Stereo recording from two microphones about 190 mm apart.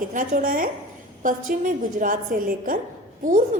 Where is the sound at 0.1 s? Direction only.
45° right (ahead or behind).